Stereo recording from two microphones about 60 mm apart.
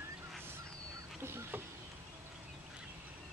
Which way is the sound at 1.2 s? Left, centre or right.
Right.